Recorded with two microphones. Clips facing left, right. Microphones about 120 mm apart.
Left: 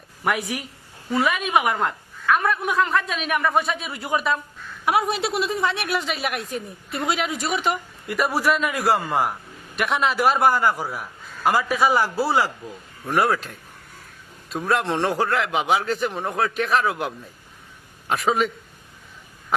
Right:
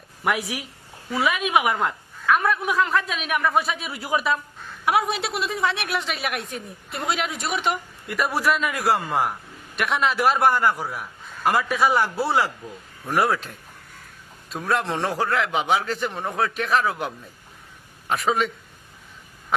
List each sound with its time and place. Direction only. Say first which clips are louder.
0.3 s a woman's voice: left 1 dB; centre (ahead or behind)